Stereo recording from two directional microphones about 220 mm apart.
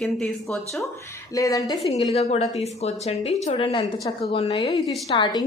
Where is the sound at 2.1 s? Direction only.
30° left (ahead or behind).